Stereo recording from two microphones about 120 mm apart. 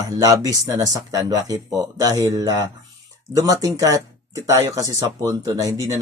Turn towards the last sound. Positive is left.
turn(degrees=-30)  # may be behind; listen again after turning